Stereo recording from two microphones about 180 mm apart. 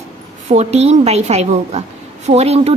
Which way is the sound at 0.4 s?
40° right (ahead or behind).